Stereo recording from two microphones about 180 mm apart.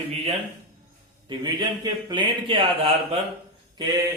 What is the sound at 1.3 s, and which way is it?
A man's voice, 25° right (ahead or behind).